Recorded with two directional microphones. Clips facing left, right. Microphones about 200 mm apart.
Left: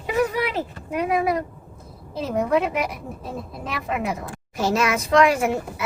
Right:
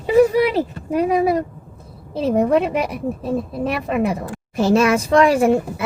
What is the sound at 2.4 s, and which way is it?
A woman's voice, 30° right (ahead or behind).